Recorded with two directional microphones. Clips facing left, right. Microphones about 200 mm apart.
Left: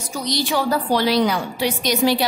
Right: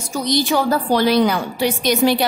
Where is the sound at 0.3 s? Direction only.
45° right (ahead or behind).